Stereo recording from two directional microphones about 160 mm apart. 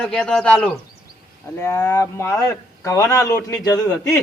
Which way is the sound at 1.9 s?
20° left (ahead or behind).